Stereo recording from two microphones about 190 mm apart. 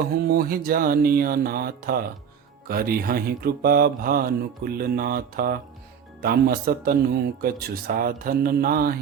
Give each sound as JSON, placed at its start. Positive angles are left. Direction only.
{"t": 0.1, "sound": "speech", "side_deg": -55}